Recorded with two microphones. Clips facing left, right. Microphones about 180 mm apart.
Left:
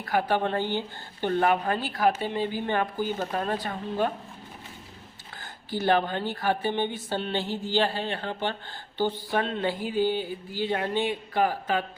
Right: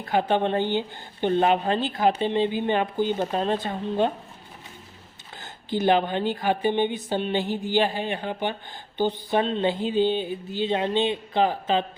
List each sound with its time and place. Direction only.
0.0 s speech: 25° right (ahead or behind)
5.4 s speech: 20° right (ahead or behind)